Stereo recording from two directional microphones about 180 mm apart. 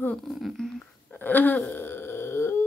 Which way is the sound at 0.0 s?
5° left (ahead or behind).